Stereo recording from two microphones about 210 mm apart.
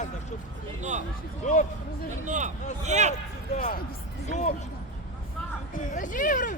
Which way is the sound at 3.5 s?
45° left (ahead or behind).